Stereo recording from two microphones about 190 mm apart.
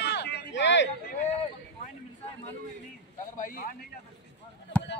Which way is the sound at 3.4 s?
45° left (ahead or behind).